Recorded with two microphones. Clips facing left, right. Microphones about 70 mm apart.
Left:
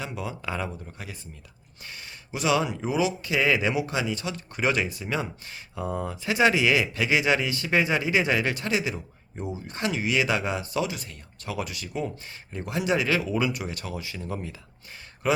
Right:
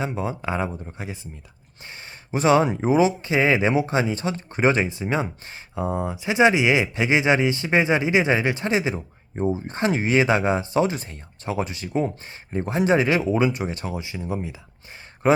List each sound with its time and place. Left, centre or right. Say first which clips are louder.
0.0 s speech: right 6 dB; right
1.9 s speech: right 7 dB; right; by 14.5 s centre
15.2 s speech: right 6 dB; right